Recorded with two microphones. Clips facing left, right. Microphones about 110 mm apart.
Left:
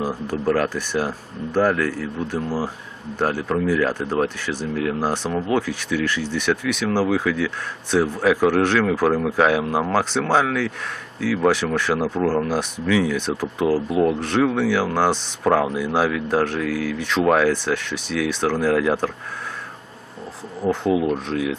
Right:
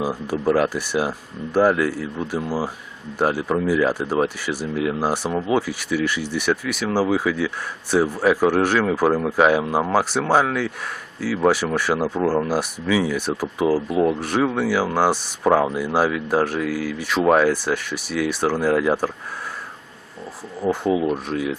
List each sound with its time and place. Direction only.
0.0 s speech: 10° right (ahead or behind)
20.6 s speech: 5° right (ahead or behind)